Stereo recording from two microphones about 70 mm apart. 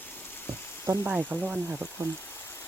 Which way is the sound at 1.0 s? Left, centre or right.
Right.